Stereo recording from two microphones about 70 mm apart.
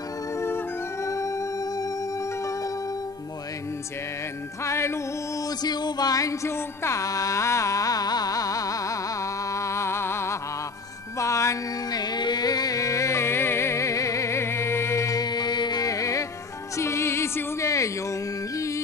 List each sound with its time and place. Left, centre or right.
1.0 s music: left
4.6 s music: left
5.6 s music: left
6.5 s music: left
11.9 s music: left
15.1 s music: left